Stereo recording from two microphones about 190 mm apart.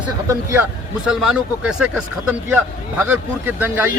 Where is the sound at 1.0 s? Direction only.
Centre (ahead or behind).